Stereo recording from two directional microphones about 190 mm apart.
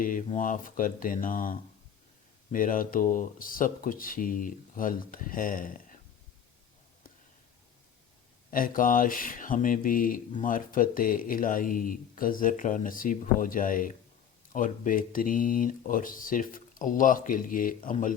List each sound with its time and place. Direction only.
0.0 s speech: 45° left (ahead or behind)
8.4 s speech: 45° left (ahead or behind)